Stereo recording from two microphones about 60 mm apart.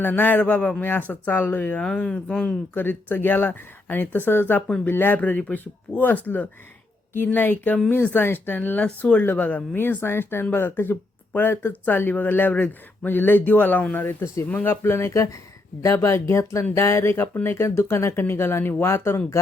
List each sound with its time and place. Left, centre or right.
0.0 s speech: left
1.8 s speech: centre
2.7 s speech: left